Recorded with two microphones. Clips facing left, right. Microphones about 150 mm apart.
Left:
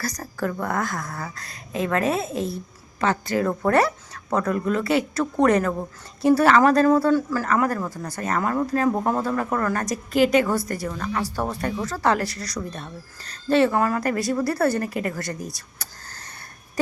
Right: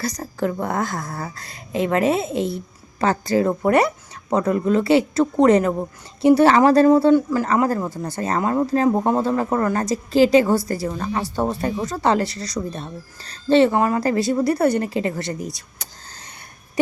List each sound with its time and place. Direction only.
0.0 s speech: 20° right (ahead or behind)
3.0 s a woman's voice: 35° right (ahead or behind)
3.4 s speech: 15° right (ahead or behind)